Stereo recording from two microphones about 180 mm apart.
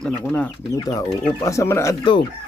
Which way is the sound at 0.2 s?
10° left (ahead or behind).